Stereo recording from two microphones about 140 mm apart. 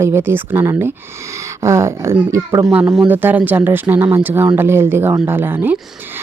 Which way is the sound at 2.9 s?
10° right (ahead or behind).